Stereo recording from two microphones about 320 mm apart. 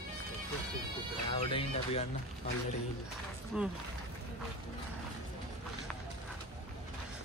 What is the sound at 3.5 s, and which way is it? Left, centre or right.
Speech, centre.